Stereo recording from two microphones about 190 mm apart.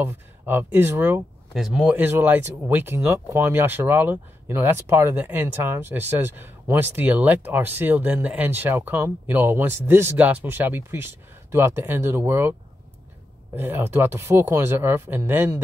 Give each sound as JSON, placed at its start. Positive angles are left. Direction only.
{"t": 0.0, "sound": "speech", "side_deg": -10}
{"t": 13.6, "sound": "speech", "side_deg": -10}